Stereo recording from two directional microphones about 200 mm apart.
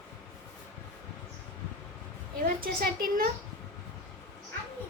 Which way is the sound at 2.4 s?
45° right (ahead or behind).